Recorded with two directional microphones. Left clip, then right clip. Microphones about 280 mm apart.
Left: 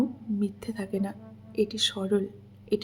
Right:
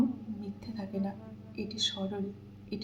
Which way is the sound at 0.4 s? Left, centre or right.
Left.